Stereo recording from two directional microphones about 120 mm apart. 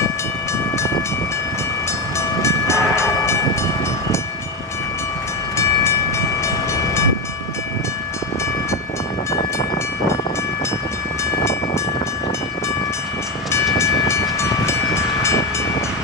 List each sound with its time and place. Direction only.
2.1 s train: 25° left (ahead or behind)
5.6 s train: 25° left (ahead or behind)
13.7 s train: 25° left (ahead or behind)